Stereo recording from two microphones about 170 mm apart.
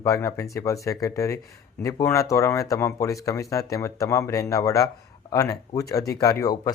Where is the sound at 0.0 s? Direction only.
20° left (ahead or behind).